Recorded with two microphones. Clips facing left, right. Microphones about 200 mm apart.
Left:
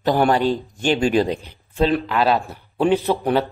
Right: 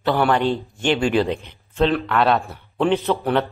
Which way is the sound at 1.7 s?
15° left (ahead or behind).